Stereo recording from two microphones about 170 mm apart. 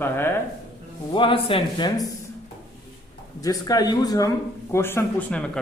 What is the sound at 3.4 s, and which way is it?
A man's voice, 20° left (ahead or behind).